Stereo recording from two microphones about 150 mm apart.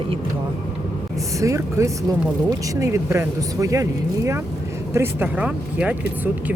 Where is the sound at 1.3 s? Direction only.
20° right (ahead or behind).